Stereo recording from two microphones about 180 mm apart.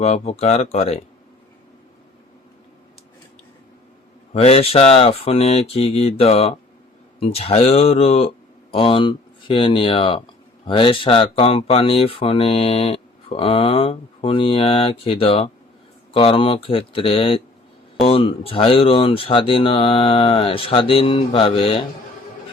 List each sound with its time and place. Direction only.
0.0 s speech: 35° left (ahead or behind)
4.3 s speech: 35° left (ahead or behind)